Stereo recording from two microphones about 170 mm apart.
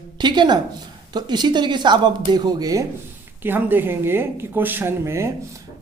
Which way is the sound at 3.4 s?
10° right (ahead or behind).